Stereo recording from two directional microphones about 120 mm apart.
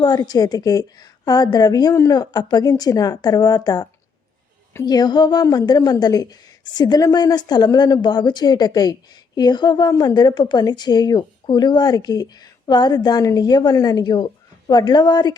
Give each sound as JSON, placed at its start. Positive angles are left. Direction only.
{"t": 0.0, "sound": "a woman's voice", "side_deg": 35}